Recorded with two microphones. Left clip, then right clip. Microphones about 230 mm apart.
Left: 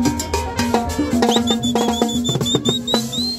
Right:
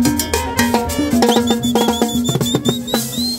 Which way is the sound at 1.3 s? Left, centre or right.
Right.